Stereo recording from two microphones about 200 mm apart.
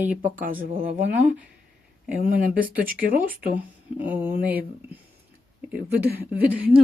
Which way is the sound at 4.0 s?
10° right (ahead or behind).